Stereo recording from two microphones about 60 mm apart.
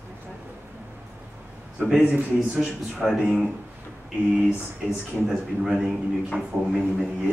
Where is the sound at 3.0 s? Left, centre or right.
Centre.